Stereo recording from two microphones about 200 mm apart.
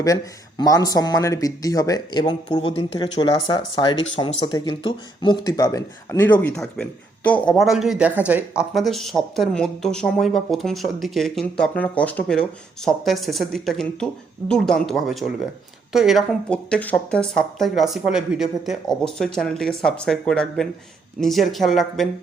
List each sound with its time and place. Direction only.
0.0 s speech: 20° left (ahead or behind); by 22.1 s centre (ahead or behind)